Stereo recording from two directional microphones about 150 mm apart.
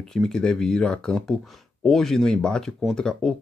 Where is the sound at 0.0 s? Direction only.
5° left (ahead or behind).